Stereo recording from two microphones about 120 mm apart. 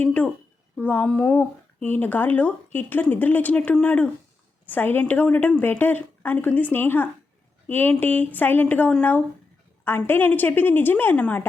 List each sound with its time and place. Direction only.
0.0 s speech: 15° left (ahead or behind)